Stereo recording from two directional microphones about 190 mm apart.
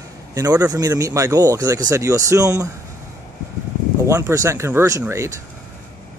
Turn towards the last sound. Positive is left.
turn(degrees=-15)  # may be behind; listen again after turning